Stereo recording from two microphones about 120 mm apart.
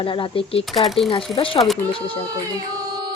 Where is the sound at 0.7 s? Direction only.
Centre (ahead or behind).